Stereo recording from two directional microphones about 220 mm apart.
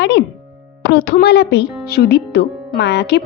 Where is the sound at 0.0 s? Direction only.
50° left (ahead or behind).